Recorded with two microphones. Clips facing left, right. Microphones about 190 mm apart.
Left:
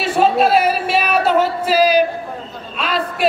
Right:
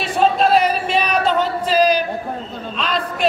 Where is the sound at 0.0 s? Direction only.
5° left (ahead or behind).